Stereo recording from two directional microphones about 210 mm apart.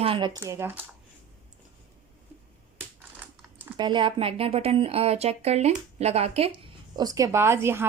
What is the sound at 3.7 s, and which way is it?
A woman's voice, 20° right (ahead or behind).